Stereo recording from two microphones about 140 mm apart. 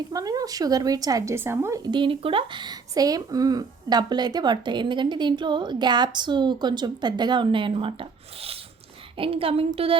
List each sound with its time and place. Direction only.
0.1 s speech: 25° right (ahead or behind)
9.1 s speech: 40° right (ahead or behind)